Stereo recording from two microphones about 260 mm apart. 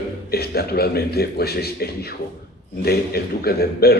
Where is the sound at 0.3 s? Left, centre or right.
Left.